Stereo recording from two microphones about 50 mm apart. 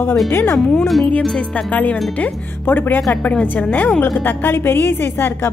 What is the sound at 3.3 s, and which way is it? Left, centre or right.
Speech, left.